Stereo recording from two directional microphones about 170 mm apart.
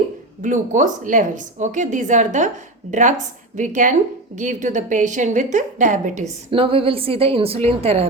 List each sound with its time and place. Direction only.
0.4 s a woman's voice: 50° right (ahead or behind)
6.5 s a woman's voice: 35° right (ahead or behind)